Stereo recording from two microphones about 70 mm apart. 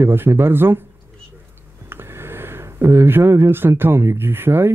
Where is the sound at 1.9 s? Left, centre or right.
Right.